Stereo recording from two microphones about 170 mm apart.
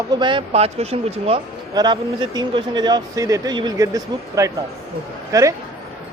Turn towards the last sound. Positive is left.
turn(degrees=-20)  # may be behind; listen again after turning